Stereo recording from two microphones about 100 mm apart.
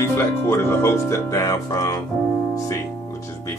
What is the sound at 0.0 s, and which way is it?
Speech, 25° left (ahead or behind).